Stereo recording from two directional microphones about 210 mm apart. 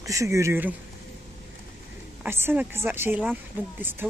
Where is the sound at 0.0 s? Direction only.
15° right (ahead or behind).